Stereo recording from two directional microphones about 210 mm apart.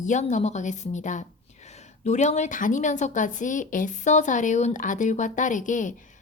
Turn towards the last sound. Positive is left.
turn(degrees=35)  # may be behind; listen again after turning